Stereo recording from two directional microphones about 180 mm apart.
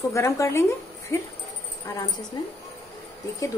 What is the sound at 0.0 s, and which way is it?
Speech, 15° left (ahead or behind).